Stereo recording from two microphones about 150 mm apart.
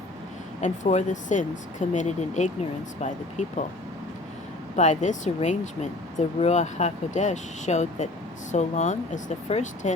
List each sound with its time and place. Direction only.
0.6 s speech: 50° left (ahead or behind)
4.8 s speech: 55° left (ahead or behind)